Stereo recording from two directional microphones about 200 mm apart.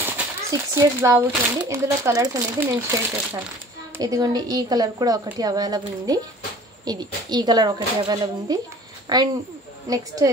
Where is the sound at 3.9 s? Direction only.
15° right (ahead or behind).